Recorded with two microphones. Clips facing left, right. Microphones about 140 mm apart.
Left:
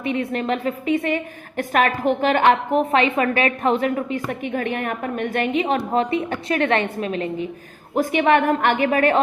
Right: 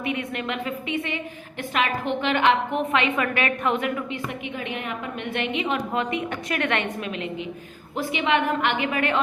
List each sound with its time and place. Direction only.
0.0 s a woman's voice: 35° left (ahead or behind)
7.9 s a woman's voice: 50° left (ahead or behind)